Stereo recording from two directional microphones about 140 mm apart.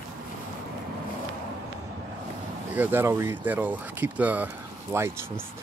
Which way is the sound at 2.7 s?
15° right (ahead or behind).